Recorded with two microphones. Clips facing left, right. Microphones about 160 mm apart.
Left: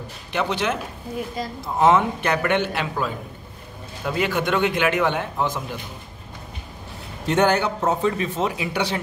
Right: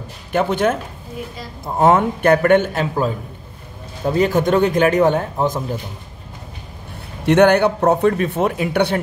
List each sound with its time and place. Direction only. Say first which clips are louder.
0.3 s a man's voice: right 6 dB; 50° right (ahead or behind)
7.2 s a man's voice: right 7 dB; 65° right (ahead or behind)